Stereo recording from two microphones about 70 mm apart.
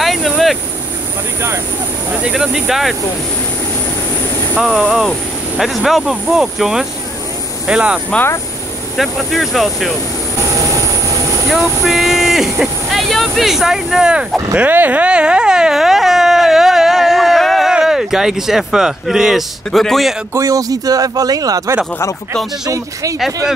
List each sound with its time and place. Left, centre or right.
0.0 s a sound: centre
2.3 s speech: centre
4.6 s speech: centre
8.9 s speech: centre
11.4 s speech: centre
14.5 s a sound: right; by 17.7 s centre
17.7 s speech: centre
20.3 s speech: right
23.1 s speech: centre